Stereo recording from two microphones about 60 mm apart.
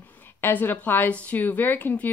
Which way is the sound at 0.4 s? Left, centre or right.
Left.